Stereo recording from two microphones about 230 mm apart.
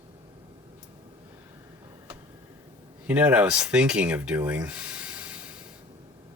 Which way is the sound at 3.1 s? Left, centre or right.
Centre.